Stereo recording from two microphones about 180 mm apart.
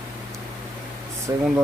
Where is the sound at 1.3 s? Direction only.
15° right (ahead or behind).